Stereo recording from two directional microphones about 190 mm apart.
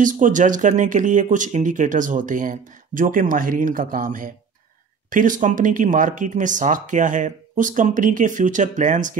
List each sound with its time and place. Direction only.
0.0 s speech: 45° right (ahead or behind)